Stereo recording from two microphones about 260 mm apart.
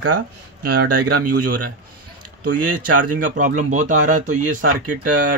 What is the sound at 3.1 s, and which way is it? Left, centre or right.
Speech, right.